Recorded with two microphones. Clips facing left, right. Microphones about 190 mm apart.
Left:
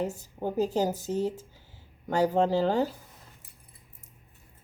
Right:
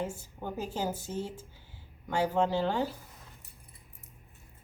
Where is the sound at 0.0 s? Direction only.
40° left (ahead or behind).